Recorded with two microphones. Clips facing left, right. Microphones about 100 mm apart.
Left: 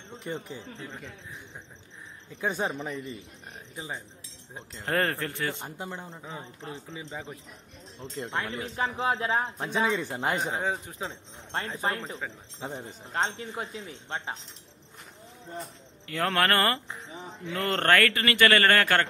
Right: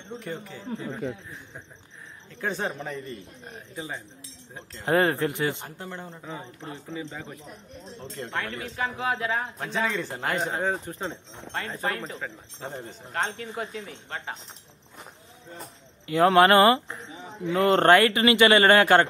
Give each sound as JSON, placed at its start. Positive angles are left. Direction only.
{"t": 0.2, "sound": "a man's voice", "side_deg": 20}
{"t": 2.4, "sound": "speech", "side_deg": 15}
{"t": 3.7, "sound": "a man's voice", "side_deg": 20}
{"t": 4.8, "sound": "a man's voice", "side_deg": -15}
{"t": 5.6, "sound": "speech", "side_deg": 15}
{"t": 8.4, "sound": "a man's voice", "side_deg": 25}
{"t": 10.6, "sound": "speech", "side_deg": 5}
{"t": 11.7, "sound": "a man's voice", "side_deg": 20}
{"t": 16.1, "sound": "a man's voice", "side_deg": -20}